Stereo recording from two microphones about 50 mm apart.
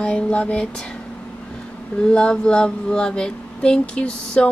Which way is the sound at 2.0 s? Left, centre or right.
Centre.